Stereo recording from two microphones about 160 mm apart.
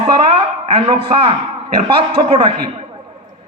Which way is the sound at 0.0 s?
35° right (ahead or behind).